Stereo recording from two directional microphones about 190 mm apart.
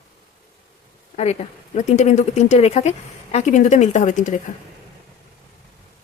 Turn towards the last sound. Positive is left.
turn(degrees=40)  # may be behind; listen again after turning